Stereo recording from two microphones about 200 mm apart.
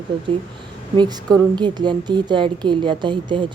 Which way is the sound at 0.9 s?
20° right (ahead or behind).